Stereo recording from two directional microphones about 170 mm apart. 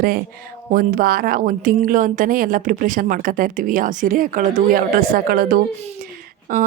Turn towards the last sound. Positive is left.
turn(degrees=-55)  # may be behind; listen again after turning